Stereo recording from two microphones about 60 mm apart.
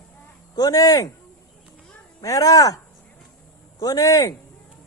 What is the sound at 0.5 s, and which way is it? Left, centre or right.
Speech, left.